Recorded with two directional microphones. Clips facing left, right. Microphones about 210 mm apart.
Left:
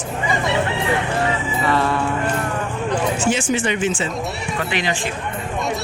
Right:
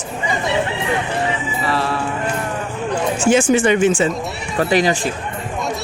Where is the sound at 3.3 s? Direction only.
50° right (ahead or behind).